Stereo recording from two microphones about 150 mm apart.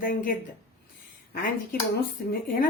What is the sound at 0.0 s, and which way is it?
A woman's voice, 70° left (ahead or behind).